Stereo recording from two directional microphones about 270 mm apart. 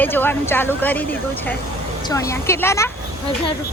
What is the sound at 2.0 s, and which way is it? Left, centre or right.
Speech, centre.